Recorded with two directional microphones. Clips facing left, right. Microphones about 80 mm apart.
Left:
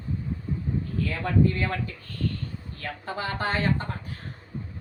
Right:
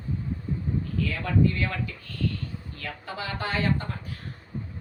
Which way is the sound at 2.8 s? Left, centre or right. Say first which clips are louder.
Left 3 dB; left.